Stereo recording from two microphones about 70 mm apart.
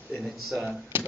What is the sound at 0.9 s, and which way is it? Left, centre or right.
Speech, right.